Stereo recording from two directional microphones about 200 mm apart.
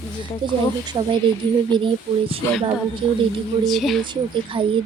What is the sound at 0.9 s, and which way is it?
Speech, 25° right (ahead or behind).